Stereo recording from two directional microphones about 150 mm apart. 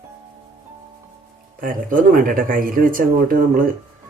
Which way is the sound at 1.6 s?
65° right (ahead or behind).